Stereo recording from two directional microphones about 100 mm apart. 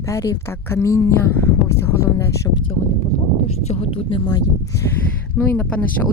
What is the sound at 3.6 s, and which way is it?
Speech, 85° left.